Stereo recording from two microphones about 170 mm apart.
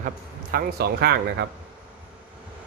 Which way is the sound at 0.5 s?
70° right (ahead or behind).